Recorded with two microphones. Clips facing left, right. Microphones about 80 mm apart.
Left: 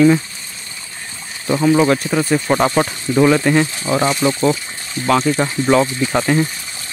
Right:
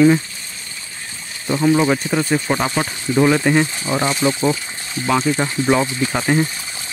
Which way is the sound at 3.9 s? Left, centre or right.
Centre.